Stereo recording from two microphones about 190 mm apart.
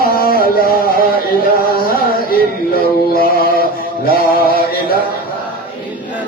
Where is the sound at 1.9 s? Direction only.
50° left (ahead or behind).